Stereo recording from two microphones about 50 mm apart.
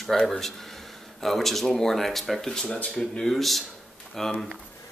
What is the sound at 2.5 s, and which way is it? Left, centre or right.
Speech, centre.